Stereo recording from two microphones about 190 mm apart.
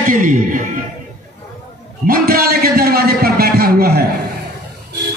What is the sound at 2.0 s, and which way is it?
A man's voice, 50° right (ahead or behind).